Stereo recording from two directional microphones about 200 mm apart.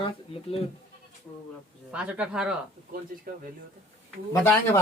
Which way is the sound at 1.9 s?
5° right (ahead or behind).